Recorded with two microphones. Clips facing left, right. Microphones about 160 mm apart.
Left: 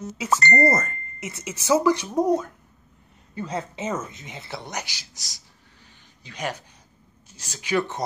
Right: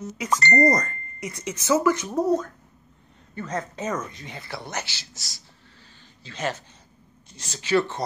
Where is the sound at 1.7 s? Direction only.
10° left (ahead or behind).